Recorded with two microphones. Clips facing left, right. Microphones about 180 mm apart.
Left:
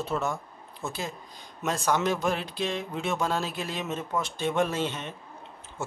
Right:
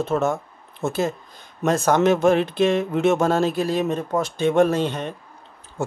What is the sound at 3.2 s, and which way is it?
A man's voice, 45° right (ahead or behind).